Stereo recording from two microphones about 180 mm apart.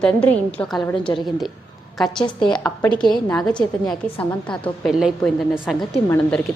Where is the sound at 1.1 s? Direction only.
20° left (ahead or behind).